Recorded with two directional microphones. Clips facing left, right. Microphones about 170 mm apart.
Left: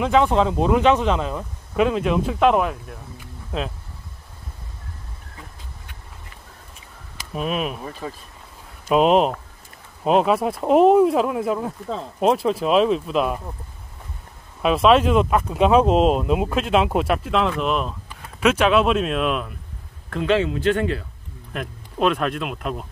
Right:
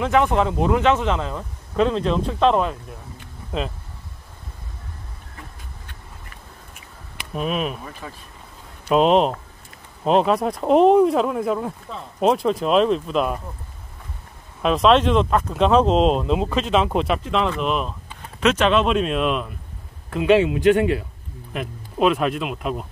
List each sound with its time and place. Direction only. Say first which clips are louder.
0.0 s speech: left 1 dB; 15° left (ahead or behind); by 3.7 s centre (ahead or behind)
7.3 s speech: even; centre (ahead or behind)
8.0 s speech: left 7 dB; 30° left (ahead or behind)
8.8 s speech: even; 5° left (ahead or behind)
14.6 s speech: even; 5° left (ahead or behind)
20.1 s a man's voice: right 4 dB; 10° right (ahead or behind)
21.5 s speech: right 2 dB; 5° right (ahead or behind)